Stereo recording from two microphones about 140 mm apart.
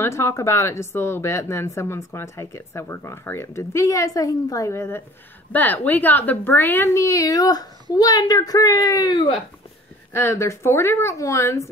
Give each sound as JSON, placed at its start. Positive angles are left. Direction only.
{"t": 0.0, "sound": "speech", "side_deg": 20}